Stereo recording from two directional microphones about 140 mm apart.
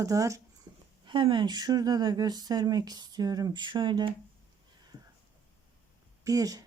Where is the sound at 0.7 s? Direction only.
25° right (ahead or behind).